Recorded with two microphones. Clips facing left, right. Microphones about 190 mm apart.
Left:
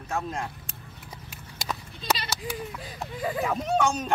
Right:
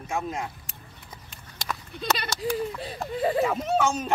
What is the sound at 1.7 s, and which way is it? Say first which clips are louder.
Bleat: even; 20° left (ahead or behind).